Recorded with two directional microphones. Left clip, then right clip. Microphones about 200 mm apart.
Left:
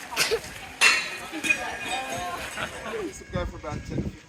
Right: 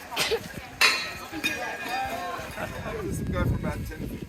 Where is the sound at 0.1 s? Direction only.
45° right (ahead or behind).